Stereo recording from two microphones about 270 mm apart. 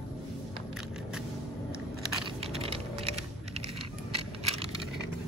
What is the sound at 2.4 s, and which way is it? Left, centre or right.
Typing, right.